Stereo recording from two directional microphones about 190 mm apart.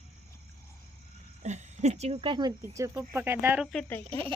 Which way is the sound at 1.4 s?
40° right (ahead or behind).